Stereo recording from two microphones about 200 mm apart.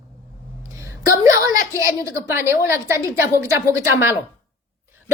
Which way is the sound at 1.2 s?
15° right (ahead or behind).